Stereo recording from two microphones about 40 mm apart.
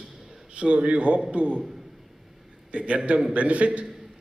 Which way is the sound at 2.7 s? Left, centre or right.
Right.